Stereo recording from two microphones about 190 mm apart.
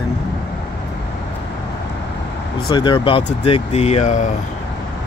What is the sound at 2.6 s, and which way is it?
Speech, 25° left (ahead or behind).